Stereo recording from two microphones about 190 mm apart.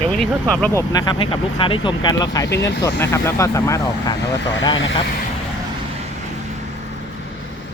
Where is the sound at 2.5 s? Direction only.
65° left (ahead or behind).